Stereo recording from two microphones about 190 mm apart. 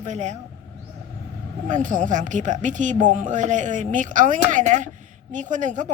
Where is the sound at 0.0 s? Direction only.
40° right (ahead or behind).